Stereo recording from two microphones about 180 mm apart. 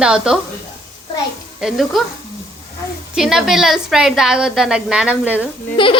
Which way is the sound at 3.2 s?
5° right (ahead or behind).